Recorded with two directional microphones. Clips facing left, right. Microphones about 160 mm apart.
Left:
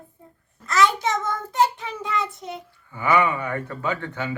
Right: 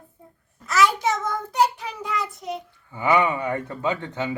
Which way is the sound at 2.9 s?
20° right (ahead or behind).